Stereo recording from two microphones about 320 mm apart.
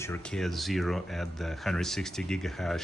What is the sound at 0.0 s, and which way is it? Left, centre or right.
Speech, centre.